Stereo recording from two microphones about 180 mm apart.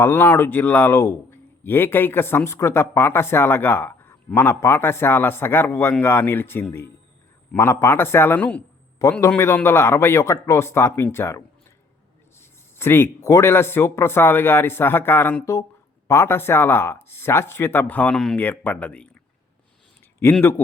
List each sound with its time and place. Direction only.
0.0 s a man's voice: 10° left (ahead or behind)
20.2 s a man's voice: 15° left (ahead or behind)